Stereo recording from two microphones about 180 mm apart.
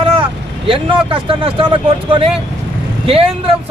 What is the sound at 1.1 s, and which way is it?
Speech, 30° right (ahead or behind).